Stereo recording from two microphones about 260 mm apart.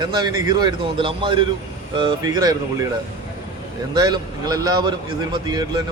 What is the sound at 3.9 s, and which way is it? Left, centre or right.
A man's voice, centre.